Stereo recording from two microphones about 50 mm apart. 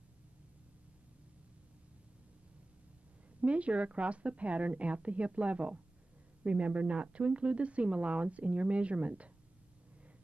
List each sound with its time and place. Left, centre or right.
3.3 s speech: right